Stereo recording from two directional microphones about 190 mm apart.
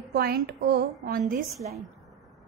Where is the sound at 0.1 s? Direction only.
55° right (ahead or behind).